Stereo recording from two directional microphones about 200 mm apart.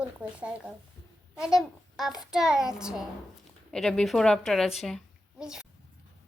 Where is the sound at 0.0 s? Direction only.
5° right (ahead or behind).